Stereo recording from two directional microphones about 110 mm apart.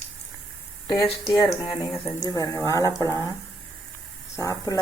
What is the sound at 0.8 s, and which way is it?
Speech, 40° left (ahead or behind).